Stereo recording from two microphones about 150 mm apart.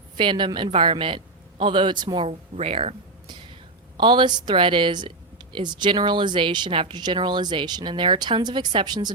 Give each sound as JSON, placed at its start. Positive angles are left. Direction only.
{"t": 0.2, "sound": "a woman's voice", "side_deg": -35}